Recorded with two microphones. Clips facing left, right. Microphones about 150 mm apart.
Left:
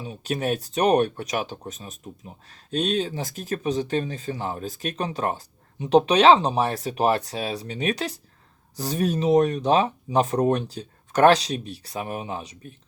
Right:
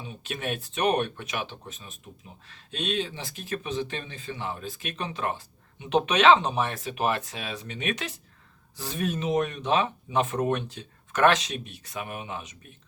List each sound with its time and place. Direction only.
0.0 s speech: 40° left (ahead or behind)